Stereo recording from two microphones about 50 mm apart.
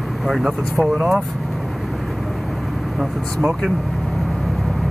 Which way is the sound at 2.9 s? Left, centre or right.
Centre.